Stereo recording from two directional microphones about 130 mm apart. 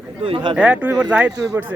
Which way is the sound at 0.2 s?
45° right (ahead or behind).